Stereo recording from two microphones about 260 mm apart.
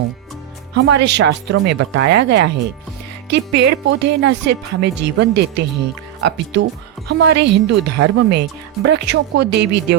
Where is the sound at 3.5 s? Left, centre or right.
Right.